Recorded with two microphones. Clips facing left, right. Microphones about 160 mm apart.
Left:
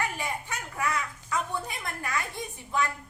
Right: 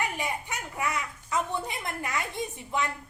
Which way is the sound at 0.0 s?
20° right (ahead or behind).